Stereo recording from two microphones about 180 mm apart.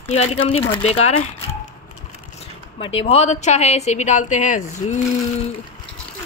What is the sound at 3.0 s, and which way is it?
Speech, 35° left (ahead or behind).